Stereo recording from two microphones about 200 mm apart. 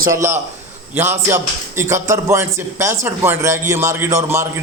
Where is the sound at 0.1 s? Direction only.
15° right (ahead or behind).